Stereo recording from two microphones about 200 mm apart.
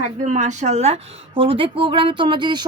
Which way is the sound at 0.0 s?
40° right (ahead or behind).